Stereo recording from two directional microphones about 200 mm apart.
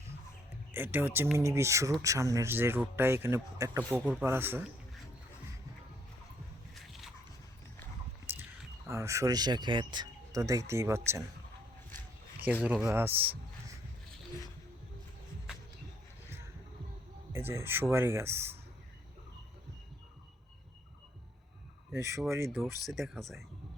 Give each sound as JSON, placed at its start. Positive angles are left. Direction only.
{"t": 0.7, "sound": "speech", "side_deg": -10}
{"t": 6.7, "sound": "a sound", "side_deg": 0}
{"t": 8.3, "sound": "a sound", "side_deg": -10}
{"t": 8.9, "sound": "speech", "side_deg": -15}
{"t": 12.6, "sound": "speech", "side_deg": -10}
{"t": 17.3, "sound": "speech", "side_deg": -10}
{"t": 21.9, "sound": "speech", "side_deg": -15}
{"t": 22.4, "sound": "speech", "side_deg": 0}